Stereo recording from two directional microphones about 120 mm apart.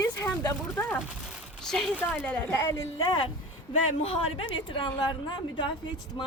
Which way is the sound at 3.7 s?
55° left (ahead or behind).